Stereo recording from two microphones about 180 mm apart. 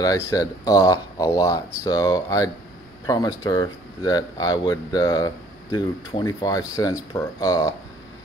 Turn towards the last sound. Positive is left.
turn(degrees=15)  # may be behind; listen again after turning